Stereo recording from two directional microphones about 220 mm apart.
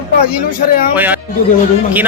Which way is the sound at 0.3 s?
40° left (ahead or behind).